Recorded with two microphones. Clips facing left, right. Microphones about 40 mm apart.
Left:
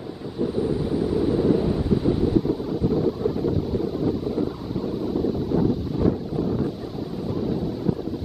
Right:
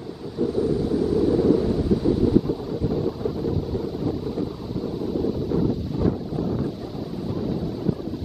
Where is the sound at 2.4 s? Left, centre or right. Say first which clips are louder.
Left 2 dB; centre.